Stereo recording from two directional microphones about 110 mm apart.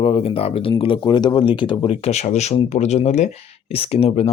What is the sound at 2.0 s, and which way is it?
Speech, 85° left.